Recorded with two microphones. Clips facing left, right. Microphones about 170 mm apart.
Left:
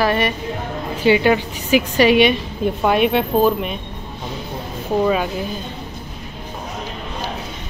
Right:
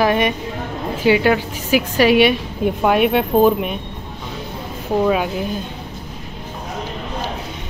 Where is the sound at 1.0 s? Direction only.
5° right (ahead or behind).